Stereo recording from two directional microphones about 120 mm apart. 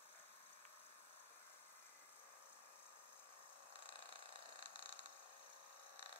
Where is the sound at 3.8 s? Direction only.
45° left (ahead or behind).